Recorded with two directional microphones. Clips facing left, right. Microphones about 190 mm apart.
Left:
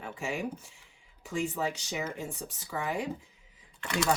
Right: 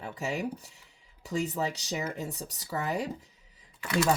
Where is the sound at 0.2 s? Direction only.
40° right (ahead or behind).